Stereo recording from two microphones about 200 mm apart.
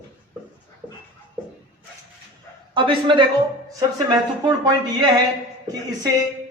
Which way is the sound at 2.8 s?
25° right (ahead or behind).